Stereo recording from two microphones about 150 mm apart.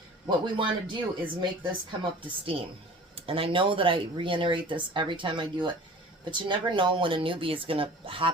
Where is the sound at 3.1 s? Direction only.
40° right (ahead or behind).